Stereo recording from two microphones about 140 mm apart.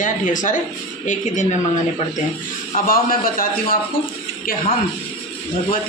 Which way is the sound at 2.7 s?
90° left.